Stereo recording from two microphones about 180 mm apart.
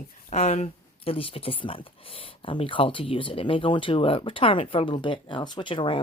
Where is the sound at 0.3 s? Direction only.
40° left (ahead or behind).